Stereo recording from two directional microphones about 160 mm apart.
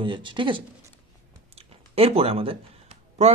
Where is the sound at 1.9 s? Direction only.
40° right (ahead or behind).